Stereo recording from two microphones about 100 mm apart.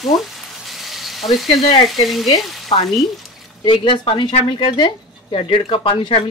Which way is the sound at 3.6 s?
55° left (ahead or behind).